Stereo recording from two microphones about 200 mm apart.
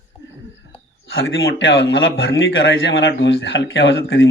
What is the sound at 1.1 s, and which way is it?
Speech, 75° left (ahead or behind).